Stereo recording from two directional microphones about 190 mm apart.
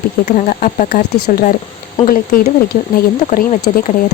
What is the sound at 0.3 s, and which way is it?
Speech, 45° left (ahead or behind).